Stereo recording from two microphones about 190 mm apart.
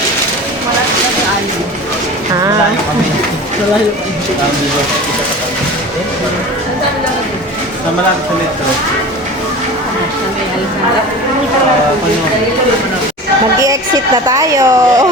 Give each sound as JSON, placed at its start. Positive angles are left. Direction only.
{"t": 14.3, "sound": "speech", "side_deg": -15}